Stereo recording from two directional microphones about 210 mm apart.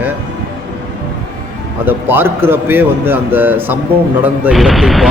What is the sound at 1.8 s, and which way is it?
Speech, 10° right (ahead or behind).